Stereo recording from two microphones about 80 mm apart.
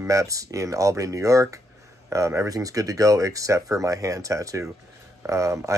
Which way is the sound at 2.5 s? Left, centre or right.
Right.